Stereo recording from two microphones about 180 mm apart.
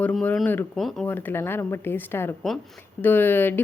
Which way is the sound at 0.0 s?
5° left (ahead or behind).